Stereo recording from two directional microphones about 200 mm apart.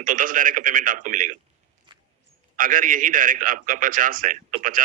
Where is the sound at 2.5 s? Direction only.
45° right (ahead or behind).